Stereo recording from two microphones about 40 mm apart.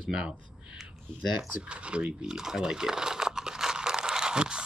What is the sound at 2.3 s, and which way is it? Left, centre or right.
Crumpling, centre.